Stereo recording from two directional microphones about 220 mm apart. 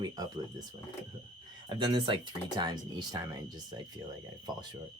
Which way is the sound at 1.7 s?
20° right (ahead or behind).